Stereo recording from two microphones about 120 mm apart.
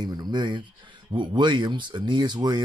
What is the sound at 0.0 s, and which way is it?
Speech, 35° right (ahead or behind).